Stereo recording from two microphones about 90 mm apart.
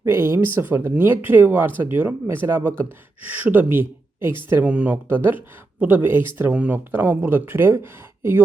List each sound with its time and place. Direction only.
0.0 s speech: 30° right (ahead or behind)
6.5 s speech: 15° right (ahead or behind)